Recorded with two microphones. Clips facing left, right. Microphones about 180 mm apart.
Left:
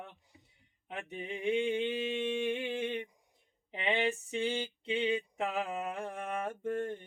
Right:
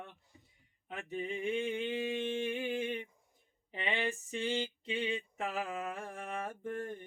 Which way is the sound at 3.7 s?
20° left (ahead or behind).